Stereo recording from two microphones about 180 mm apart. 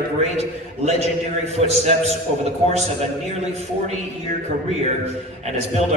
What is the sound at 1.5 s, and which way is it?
Speech, 35° right (ahead or behind).